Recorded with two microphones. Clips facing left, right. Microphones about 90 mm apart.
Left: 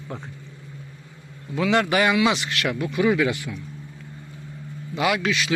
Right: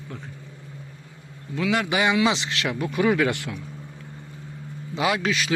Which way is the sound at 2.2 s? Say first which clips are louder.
Left 1 dB; 30° right (ahead or behind).